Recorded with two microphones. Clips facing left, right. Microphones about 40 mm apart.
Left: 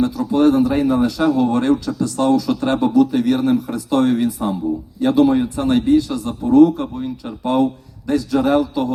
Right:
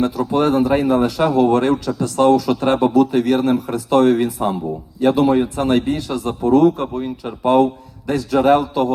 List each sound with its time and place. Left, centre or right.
0.0 s a man's voice: right
5.7 s a man's voice: right